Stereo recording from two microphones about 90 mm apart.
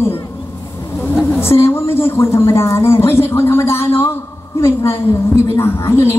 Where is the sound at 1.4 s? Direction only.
25° left (ahead or behind).